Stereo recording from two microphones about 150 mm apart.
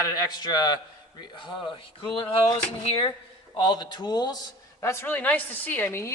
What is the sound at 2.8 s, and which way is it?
A man's voice, 40° left (ahead or behind).